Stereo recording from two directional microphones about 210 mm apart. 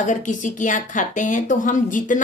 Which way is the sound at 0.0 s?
40° left (ahead or behind).